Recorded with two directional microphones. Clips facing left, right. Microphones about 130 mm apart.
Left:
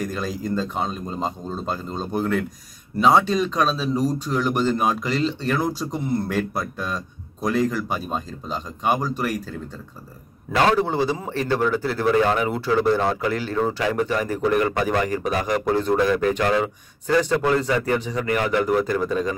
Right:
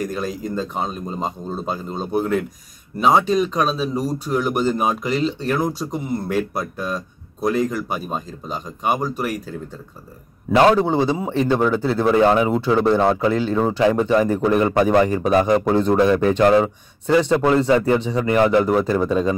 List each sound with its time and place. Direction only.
0.0 s a man's voice: 5° right (ahead or behind)
10.7 s speech: 20° right (ahead or behind)